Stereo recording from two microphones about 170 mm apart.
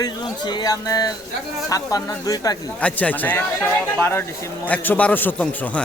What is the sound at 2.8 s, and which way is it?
Speech, 10° left (ahead or behind).